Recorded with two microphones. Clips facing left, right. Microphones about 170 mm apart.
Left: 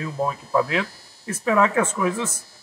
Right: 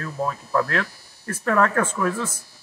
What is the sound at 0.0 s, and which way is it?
Speech, 10° left (ahead or behind).